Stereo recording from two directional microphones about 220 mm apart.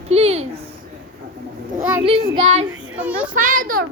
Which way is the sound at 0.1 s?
30° right (ahead or behind).